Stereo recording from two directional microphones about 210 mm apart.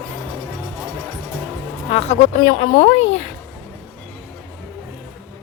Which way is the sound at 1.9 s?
30° left (ahead or behind).